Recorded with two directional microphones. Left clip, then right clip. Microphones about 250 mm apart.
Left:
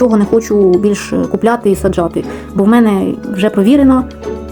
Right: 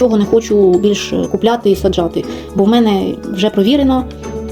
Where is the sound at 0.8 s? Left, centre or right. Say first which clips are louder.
Even; left.